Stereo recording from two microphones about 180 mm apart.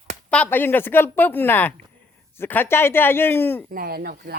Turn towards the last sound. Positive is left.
turn(degrees=-60)  # may be behind; listen again after turning